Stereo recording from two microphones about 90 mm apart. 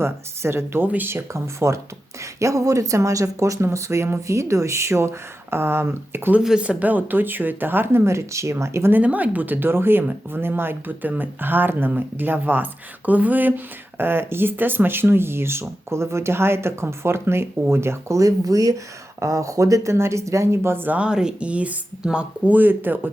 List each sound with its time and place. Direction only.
0.0 s speech: 25° right (ahead or behind)
6.4 s speech: 10° right (ahead or behind); by 9.0 s 30° right (ahead or behind)
9.0 s speech: 15° right (ahead or behind)